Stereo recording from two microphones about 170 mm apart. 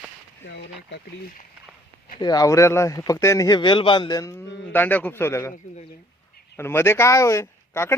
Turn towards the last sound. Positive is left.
turn(degrees=15)  # may be behind; listen again after turning